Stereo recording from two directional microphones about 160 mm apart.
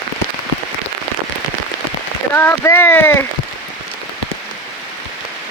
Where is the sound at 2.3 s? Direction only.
15° left (ahead or behind).